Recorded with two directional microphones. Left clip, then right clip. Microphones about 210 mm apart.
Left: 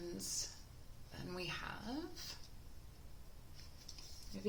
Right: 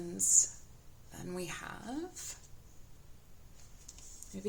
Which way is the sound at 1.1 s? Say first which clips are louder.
Right 3 dB; 30° right (ahead or behind).